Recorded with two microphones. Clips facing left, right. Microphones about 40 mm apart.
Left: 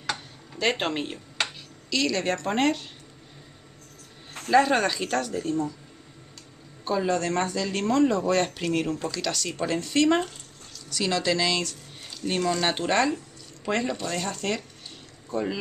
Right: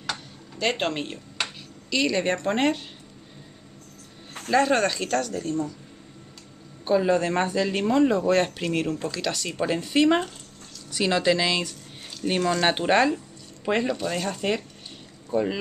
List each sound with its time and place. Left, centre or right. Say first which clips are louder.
0.1 s a sound: left 1 dB; centre
1.9 s speech: right 2 dB; centre
2.4 s speech: right 1 dB; centre
4.5 s speech: even; centre
6.8 s speech: right 4 dB; centre